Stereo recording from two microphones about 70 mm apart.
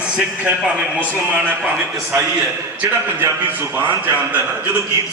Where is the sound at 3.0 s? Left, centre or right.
Right.